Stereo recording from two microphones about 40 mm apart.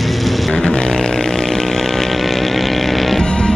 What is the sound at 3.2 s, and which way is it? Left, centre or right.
Music, centre.